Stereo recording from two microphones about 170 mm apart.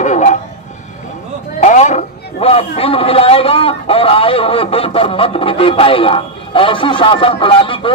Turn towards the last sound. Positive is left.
turn(degrees=30)  # may be behind; listen again after turning